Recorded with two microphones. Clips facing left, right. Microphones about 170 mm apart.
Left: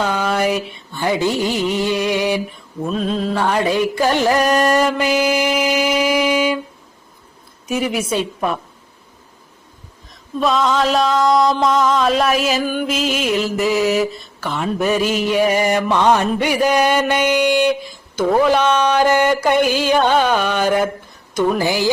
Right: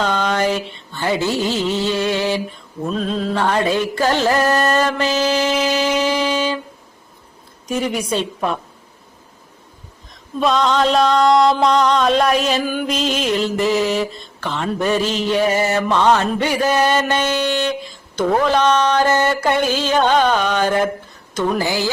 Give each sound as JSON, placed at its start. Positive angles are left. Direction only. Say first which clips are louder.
{"t": 0.0, "sound": "a sound", "louder": "even", "side_deg": 10}
{"t": 1.2, "sound": "mantra", "louder": "left 1 dB", "side_deg": 15}
{"t": 2.8, "sound": "mantra", "louder": "left 1 dB", "side_deg": 5}
{"t": 7.7, "sound": "mantra", "louder": "left 1 dB", "side_deg": 10}
{"t": 10.4, "sound": "music", "louder": "even", "side_deg": 0}
{"t": 15.9, "sound": "mantra", "louder": "right 1 dB", "side_deg": 15}